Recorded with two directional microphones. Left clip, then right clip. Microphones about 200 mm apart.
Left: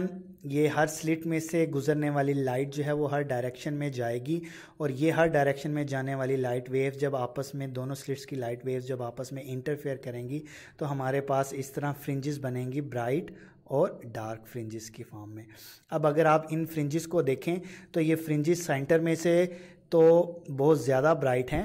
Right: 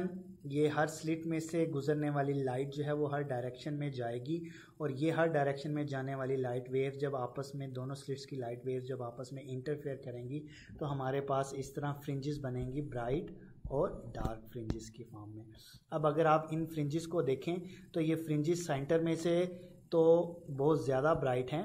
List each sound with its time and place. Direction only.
0.0 s speech: 25° left (ahead or behind)
15.9 s speech: 25° left (ahead or behind)